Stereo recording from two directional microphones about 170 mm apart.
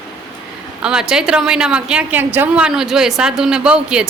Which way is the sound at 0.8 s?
5° right (ahead or behind).